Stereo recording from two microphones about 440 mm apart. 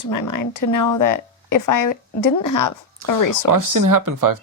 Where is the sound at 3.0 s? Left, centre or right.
Right.